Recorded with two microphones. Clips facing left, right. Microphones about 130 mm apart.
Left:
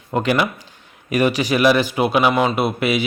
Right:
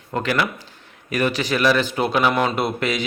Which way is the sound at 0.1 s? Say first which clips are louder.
Left 3 dB; 15° left (ahead or behind).